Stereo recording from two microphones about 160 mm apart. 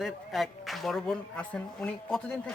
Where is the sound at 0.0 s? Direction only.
Centre (ahead or behind).